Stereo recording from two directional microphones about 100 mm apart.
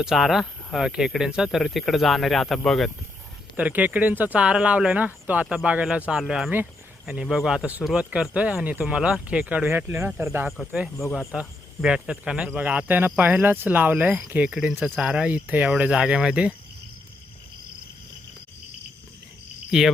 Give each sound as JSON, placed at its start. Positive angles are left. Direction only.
{"t": 0.0, "sound": "speech", "side_deg": -5}
{"t": 3.5, "sound": "speech", "side_deg": -15}
{"t": 10.6, "sound": "speech", "side_deg": -5}
{"t": 19.7, "sound": "speech", "side_deg": -5}